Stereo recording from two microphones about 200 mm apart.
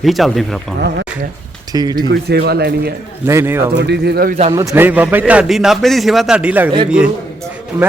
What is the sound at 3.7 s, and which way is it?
Speech, 55° right (ahead or behind).